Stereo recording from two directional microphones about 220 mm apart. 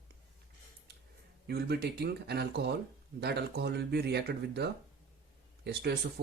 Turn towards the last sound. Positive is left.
turn(degrees=-50)  # may be behind; listen again after turning